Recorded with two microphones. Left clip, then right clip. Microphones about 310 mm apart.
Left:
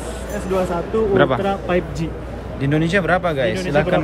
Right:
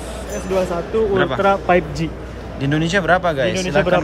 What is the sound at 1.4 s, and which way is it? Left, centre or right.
Speech, right.